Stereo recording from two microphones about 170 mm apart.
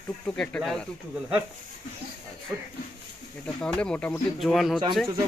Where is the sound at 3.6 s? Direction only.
5° left (ahead or behind).